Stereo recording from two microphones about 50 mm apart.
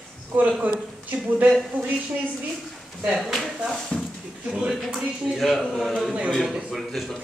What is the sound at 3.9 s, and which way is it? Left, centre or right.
Speech, centre.